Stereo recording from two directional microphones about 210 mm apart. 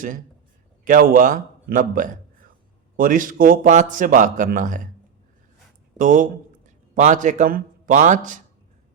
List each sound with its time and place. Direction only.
0.9 s a man's voice: 40° right (ahead or behind)
6.0 s a man's voice: 40° right (ahead or behind)